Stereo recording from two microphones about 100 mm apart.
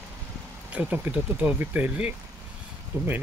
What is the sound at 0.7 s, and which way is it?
Speech, 15° right (ahead or behind).